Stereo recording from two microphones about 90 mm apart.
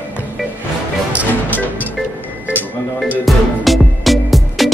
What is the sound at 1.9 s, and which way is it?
Music, 20° right (ahead or behind).